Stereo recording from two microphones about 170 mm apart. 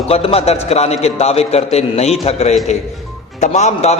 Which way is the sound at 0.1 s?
35° left (ahead or behind).